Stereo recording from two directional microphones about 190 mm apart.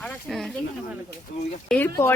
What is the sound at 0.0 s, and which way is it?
Speech, centre (ahead or behind).